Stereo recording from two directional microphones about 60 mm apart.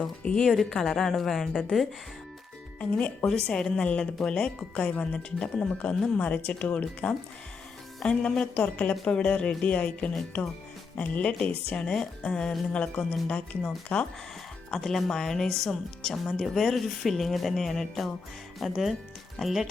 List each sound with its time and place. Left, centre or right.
0.0 s a woman's voice: centre
0.4 s speech: centre
2.9 s speech: left
3.2 s a woman's voice: centre
14.8 s speech: centre